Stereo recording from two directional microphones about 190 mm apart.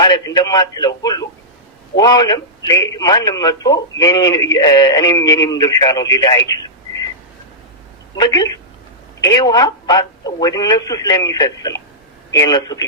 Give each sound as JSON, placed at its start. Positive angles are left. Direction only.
{"t": 0.0, "sound": "a man's voice", "side_deg": 20}
{"t": 8.1, "sound": "a man's voice", "side_deg": 20}